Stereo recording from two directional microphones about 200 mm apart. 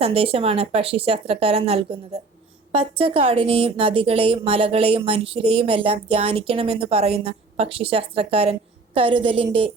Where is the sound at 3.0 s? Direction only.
30° right (ahead or behind).